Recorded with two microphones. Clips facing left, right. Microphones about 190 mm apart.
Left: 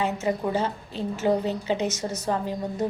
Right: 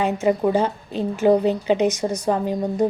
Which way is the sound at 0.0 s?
15° right (ahead or behind).